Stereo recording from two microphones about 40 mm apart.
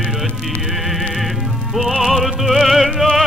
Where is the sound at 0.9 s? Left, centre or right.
Centre.